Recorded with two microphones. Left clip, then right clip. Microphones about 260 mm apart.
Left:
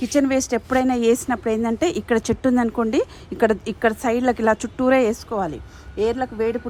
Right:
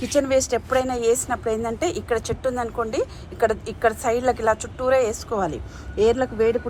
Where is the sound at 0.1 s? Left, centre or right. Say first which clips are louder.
Right 1 dB; left.